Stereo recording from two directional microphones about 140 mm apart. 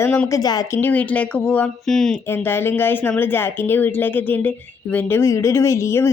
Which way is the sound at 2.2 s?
15° left (ahead or behind).